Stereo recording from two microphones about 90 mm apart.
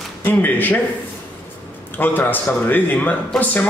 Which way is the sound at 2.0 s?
20° left (ahead or behind).